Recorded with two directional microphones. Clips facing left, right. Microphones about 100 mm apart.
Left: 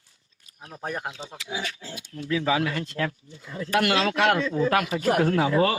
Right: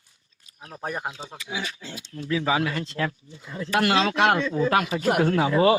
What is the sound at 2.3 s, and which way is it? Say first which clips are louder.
Speech: even; 30° right (ahead or behind).